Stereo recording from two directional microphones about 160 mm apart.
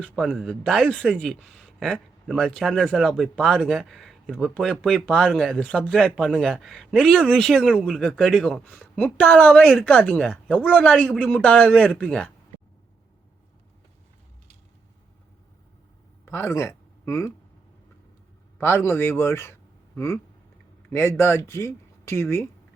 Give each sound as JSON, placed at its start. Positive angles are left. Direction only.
{"t": 0.0, "sound": "a man's voice", "side_deg": -5}
{"t": 16.2, "sound": "speech", "side_deg": 15}
{"t": 18.6, "sound": "a woman's voice", "side_deg": 15}
{"t": 20.9, "sound": "a woman's voice", "side_deg": 15}